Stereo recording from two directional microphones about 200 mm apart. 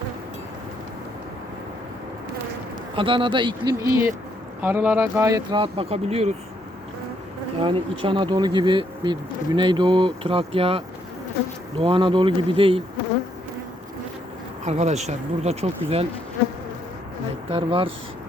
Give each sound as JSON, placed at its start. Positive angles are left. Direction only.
{"t": 2.9, "sound": "speech", "side_deg": -25}
{"t": 7.6, "sound": "speech", "side_deg": -25}
{"t": 14.6, "sound": "speech", "side_deg": -35}
{"t": 17.5, "sound": "speech", "side_deg": -30}